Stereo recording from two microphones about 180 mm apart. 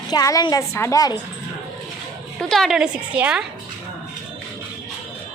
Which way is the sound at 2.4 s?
Centre (ahead or behind).